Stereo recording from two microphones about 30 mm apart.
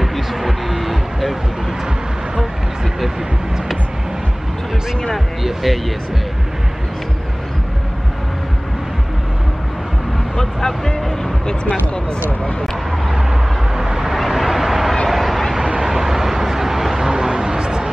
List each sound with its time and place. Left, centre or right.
0.0 s a sound: centre
5.4 s speech: centre
10.3 s speech: centre
11.7 s speech: left
13.7 s vehicle: centre
14.1 s vehicle: centre
15.0 s a sound: centre
15.8 s vehicle: centre
16.9 s vehicle: centre